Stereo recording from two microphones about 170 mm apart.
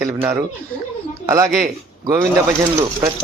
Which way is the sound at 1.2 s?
20° right (ahead or behind).